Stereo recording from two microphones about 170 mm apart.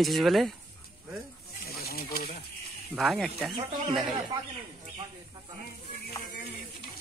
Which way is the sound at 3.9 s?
25° right (ahead or behind).